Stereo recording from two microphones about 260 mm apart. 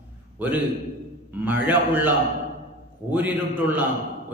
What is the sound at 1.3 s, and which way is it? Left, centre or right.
A man's voice, centre.